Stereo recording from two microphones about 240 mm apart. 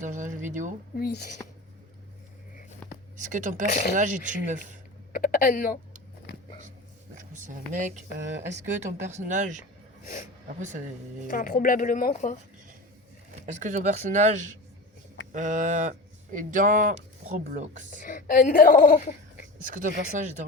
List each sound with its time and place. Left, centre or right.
0.0 s speech: right
0.9 s speech: left
3.2 s speech: right
3.7 s speech: left
3.9 s speech: right
5.1 s speech: left
7.2 s speech: right
11.3 s speech: left
13.4 s speech: right
17.9 s speech: left
19.6 s speech: right